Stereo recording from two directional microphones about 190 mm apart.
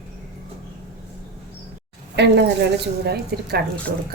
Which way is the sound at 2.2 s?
65° right (ahead or behind).